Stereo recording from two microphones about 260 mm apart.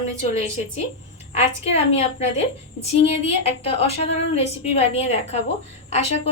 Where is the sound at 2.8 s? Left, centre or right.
Left.